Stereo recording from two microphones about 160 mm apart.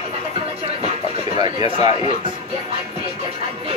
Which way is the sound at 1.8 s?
30° right (ahead or behind).